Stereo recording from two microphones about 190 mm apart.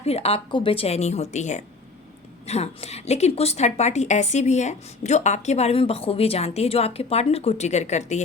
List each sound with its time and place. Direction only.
0.0 s a woman's voice: 30° left (ahead or behind)